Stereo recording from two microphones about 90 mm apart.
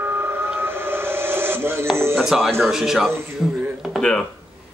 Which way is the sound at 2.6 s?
5° right (ahead or behind).